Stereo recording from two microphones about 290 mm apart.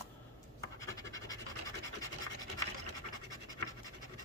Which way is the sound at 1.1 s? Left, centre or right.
Centre.